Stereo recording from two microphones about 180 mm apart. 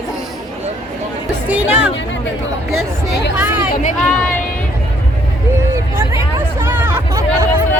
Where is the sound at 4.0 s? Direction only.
5° left (ahead or behind).